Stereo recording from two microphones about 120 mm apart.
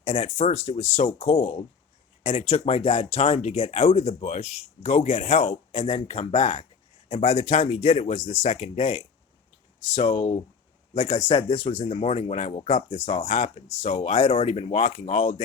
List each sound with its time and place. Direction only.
0.0 s speech: 60° left (ahead or behind); by 6.6 s 90° left
7.1 s speech: 60° left (ahead or behind)
9.9 s speech: 45° left (ahead or behind); by 13.0 s 65° left (ahead or behind)
13.2 s speech: 80° left; by 15.4 s 60° left (ahead or behind)